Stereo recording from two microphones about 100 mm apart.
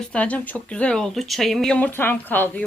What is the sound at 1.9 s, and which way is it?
Speech, 20° left (ahead or behind).